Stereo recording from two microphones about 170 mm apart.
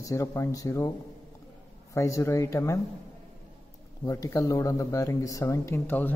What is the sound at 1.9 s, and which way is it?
Speech, 15° left (ahead or behind).